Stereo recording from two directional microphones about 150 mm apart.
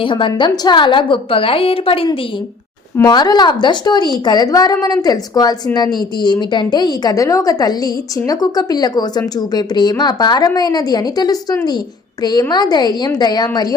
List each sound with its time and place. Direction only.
0.0 s a woman's voice: 35° left (ahead or behind)
2.9 s a woman's voice: 25° left (ahead or behind)